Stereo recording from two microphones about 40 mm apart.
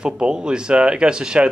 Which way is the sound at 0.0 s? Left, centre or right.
Right.